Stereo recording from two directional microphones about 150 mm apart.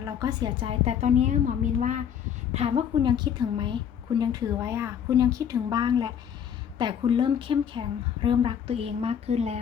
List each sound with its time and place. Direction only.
0.0 s a woman's voice: 25° right (ahead or behind); by 2.0 s 55° right (ahead or behind)
2.5 s a woman's voice: 45° right (ahead or behind)